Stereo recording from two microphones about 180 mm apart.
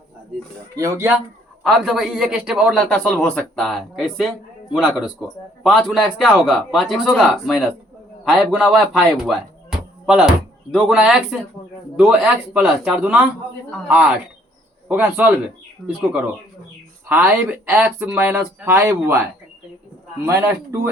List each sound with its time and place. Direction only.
0.8 s speech: 15° right (ahead or behind)
1.6 s a man's voice: centre (ahead or behind)
14.8 s speech: 10° right (ahead or behind)
17.1 s speech: 10° right (ahead or behind)
20.2 s speech: 15° right (ahead or behind)